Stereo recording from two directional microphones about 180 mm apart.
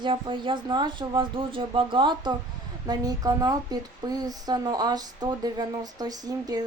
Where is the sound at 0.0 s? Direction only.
25° right (ahead or behind).